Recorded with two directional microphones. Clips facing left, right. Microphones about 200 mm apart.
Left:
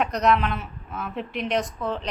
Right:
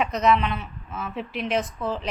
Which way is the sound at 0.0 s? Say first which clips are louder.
Even; centre (ahead or behind).